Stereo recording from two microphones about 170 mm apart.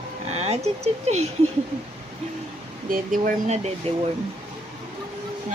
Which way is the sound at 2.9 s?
50° right (ahead or behind).